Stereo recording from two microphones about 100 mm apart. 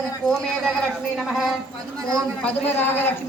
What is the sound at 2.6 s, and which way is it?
Speech, 20° left (ahead or behind).